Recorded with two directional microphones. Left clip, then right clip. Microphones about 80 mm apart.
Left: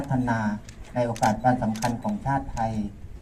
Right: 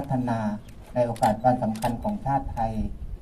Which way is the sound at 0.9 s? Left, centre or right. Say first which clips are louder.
Right 1 dB; centre.